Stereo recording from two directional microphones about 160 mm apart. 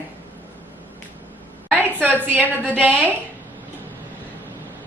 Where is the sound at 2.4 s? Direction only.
10° left (ahead or behind).